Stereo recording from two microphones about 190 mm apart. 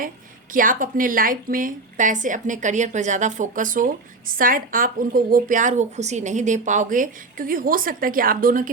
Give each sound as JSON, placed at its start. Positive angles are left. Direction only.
{"t": 0.5, "sound": "a woman's voice", "side_deg": -45}